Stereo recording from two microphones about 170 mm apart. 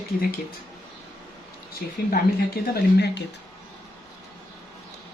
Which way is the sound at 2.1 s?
65° left (ahead or behind).